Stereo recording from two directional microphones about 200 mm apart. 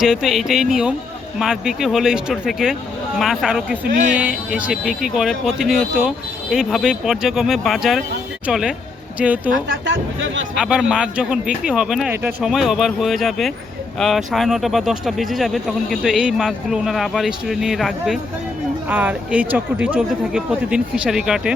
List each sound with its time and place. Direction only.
0.0 s a woman's voice: centre (ahead or behind)
9.8 s speech: 65° right (ahead or behind)
10.6 s speech: 5° right (ahead or behind)